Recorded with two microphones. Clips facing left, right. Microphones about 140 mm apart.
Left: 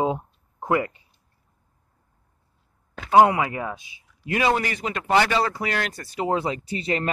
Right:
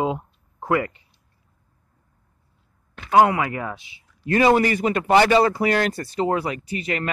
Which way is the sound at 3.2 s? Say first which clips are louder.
Even; 20° left (ahead or behind).